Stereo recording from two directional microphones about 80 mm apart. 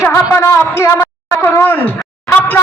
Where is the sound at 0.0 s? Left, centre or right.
Left.